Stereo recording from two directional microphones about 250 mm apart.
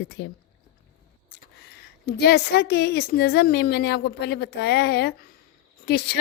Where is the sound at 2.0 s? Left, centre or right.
Left.